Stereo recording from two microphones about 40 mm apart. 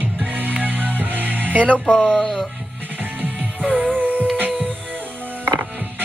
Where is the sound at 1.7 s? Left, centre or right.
Left.